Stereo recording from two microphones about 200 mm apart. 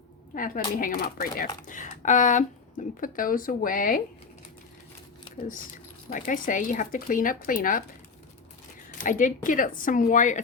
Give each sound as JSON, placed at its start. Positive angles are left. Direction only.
{"t": 0.3, "sound": "speech", "side_deg": 45}
{"t": 6.1, "sound": "speech", "side_deg": 40}
{"t": 8.9, "sound": "speech", "side_deg": 40}